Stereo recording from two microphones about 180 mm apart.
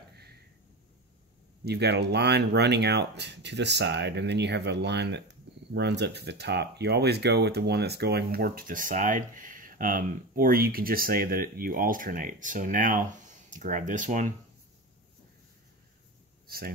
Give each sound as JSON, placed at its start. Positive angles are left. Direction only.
{"t": 1.6, "sound": "speech", "side_deg": -65}
{"t": 16.4, "sound": "speech", "side_deg": -55}